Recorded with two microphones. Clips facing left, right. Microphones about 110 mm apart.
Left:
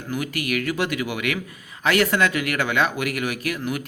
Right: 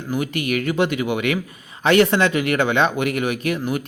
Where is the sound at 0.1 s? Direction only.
25° right (ahead or behind).